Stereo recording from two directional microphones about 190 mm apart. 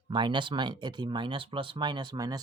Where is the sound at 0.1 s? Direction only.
25° right (ahead or behind).